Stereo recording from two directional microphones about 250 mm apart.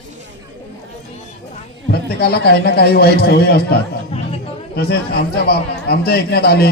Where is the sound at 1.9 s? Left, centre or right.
Left.